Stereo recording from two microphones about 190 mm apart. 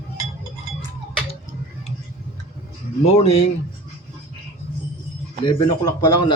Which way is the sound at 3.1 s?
35° left (ahead or behind).